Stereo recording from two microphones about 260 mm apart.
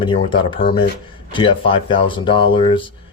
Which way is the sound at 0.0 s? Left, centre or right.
Centre.